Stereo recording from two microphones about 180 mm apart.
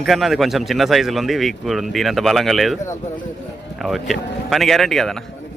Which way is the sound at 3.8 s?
Centre (ahead or behind).